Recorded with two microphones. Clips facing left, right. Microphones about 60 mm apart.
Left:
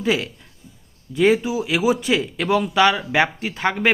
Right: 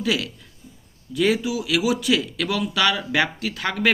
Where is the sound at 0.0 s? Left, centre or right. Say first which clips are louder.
Left 3 dB; left.